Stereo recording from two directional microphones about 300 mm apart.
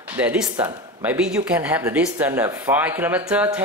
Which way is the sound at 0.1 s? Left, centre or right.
Centre.